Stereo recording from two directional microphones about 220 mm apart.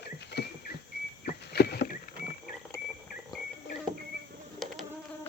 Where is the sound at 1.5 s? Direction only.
45° left (ahead or behind).